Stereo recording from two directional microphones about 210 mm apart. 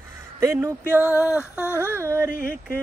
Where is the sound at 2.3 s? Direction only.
45° left (ahead or behind).